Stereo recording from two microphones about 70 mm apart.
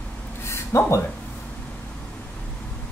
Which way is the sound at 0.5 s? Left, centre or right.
Left.